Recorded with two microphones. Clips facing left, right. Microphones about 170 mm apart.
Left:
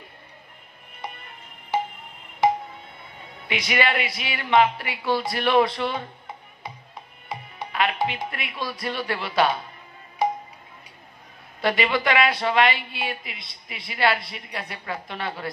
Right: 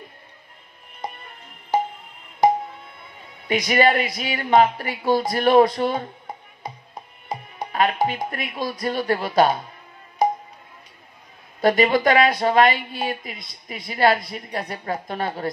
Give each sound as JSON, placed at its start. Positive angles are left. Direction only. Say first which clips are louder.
{"t": 1.0, "sound": "music", "louder": "right 4 dB", "side_deg": -40}
{"t": 3.4, "sound": "speech", "louder": "right 6 dB", "side_deg": -40}
{"t": 7.2, "sound": "speech", "louder": "right 4 dB", "side_deg": -40}
{"t": 10.2, "sound": "music", "louder": "right 3 dB", "side_deg": -40}
{"t": 11.6, "sound": "speech", "louder": "right 6 dB", "side_deg": -45}